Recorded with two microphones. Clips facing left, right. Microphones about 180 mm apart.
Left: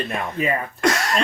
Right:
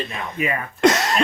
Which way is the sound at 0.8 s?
20° right (ahead or behind).